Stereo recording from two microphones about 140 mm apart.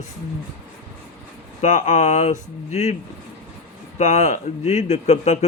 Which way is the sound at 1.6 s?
60° left (ahead or behind).